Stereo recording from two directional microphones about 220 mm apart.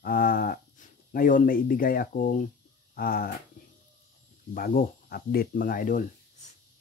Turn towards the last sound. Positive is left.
turn(degrees=40)  # may be behind; listen again after turning